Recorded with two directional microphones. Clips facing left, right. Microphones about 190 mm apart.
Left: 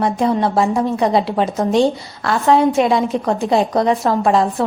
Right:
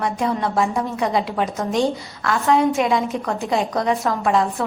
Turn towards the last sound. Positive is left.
turn(degrees=35)  # may be behind; listen again after turning